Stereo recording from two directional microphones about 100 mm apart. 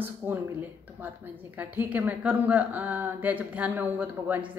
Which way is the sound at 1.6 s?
15° right (ahead or behind).